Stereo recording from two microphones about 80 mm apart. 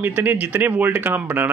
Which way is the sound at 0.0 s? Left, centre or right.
Right.